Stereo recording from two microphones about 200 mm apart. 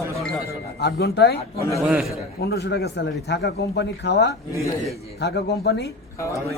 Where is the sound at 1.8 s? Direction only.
Centre (ahead or behind).